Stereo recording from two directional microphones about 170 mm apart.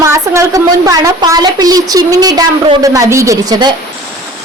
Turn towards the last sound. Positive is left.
turn(degrees=-20)  # may be behind; listen again after turning